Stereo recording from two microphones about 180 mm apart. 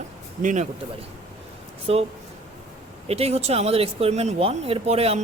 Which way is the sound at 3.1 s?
35° right (ahead or behind).